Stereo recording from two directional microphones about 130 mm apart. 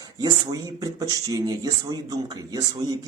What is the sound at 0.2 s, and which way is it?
Speech, 30° right (ahead or behind).